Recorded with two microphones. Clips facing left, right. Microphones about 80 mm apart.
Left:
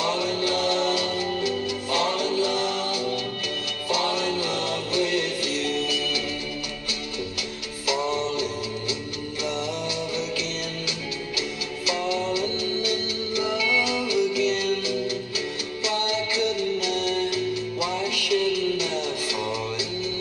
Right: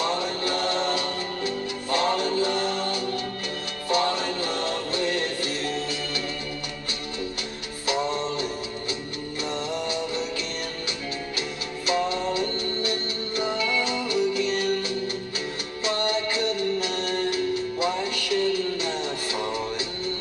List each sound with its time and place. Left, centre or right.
0.0 s music: right
7.8 s music: right
11.3 s music: right